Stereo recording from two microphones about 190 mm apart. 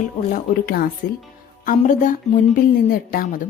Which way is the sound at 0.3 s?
50° left (ahead or behind).